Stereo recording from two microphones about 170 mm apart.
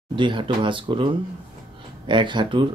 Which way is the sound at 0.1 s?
30° right (ahead or behind).